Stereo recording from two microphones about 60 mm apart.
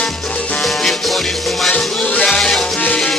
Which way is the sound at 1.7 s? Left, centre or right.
Left.